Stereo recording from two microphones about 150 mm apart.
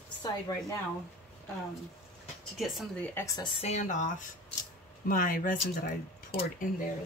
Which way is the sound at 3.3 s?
30° left (ahead or behind).